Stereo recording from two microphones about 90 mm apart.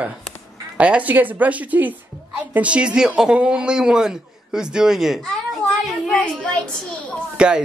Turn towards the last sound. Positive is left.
turn(degrees=-10)  # may be behind; listen again after turning